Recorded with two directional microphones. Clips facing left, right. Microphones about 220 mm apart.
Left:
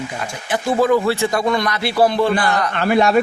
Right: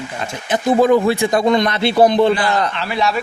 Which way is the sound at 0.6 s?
20° right (ahead or behind).